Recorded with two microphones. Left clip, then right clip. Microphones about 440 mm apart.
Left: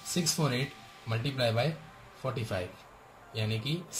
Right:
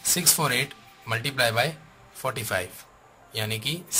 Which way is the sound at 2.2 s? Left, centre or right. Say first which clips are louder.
Right 7 dB; centre.